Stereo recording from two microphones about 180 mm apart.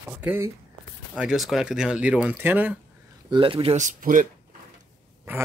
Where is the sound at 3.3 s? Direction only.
30° right (ahead or behind); by 4.2 s 50° right (ahead or behind).